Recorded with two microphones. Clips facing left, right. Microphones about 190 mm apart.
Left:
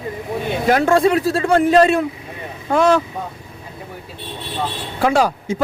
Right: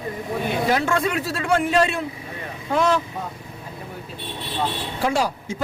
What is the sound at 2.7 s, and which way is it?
Speech, 55° left (ahead or behind).